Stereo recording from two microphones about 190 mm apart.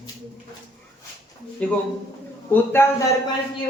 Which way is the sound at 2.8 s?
10° left (ahead or behind).